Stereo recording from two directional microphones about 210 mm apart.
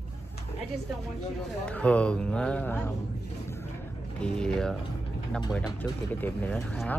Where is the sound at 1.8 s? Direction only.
5° left (ahead or behind).